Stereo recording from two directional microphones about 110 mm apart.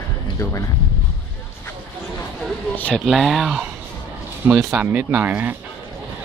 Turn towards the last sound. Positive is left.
turn(degrees=-15)  # may be behind; listen again after turning